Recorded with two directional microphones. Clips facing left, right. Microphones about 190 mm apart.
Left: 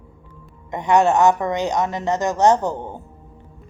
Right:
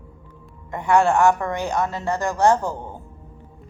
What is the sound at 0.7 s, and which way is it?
A woman's voice, 20° left (ahead or behind).